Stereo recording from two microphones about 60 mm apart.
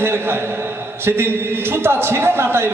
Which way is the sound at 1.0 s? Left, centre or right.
Right.